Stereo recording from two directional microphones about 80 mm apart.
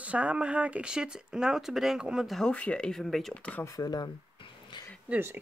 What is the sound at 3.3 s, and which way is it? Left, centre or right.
Speech, centre.